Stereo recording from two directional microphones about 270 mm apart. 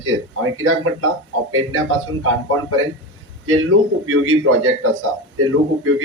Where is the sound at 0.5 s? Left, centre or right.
Right.